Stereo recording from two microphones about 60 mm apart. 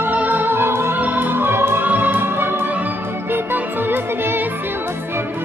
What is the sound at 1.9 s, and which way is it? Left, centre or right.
Music, right.